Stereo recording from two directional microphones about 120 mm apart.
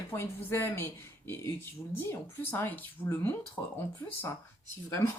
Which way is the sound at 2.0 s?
15° left (ahead or behind).